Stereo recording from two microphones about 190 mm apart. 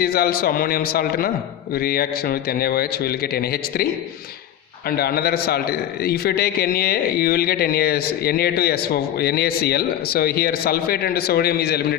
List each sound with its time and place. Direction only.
0.0 s a man's voice: 55° left (ahead or behind)
4.9 s a man's voice: 55° left (ahead or behind)